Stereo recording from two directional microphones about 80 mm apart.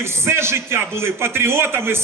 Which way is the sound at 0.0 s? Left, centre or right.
Right.